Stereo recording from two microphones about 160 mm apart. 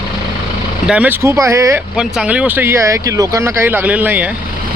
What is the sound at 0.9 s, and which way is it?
Speech, 10° right (ahead or behind).